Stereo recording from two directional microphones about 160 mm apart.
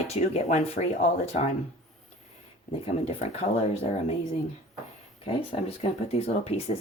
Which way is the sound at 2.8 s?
40° left (ahead or behind).